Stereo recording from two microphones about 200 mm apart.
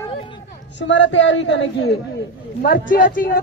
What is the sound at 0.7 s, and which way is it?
Speech, 65° left (ahead or behind).